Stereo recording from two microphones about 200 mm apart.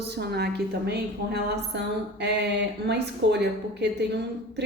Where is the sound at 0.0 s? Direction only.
55° right (ahead or behind).